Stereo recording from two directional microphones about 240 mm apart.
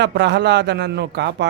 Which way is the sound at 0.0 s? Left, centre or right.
Right.